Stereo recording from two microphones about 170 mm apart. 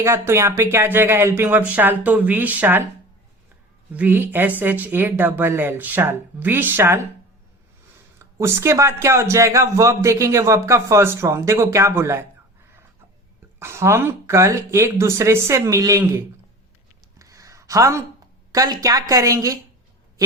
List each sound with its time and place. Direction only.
0.0 s speech: 15° right (ahead or behind)
3.9 s speech: 10° right (ahead or behind)
8.2 s speech: 15° right (ahead or behind)
13.6 s speech: 15° right (ahead or behind)
17.2 s a sound: 20° right (ahead or behind)
18.5 s a woman's voice: 20° right (ahead or behind)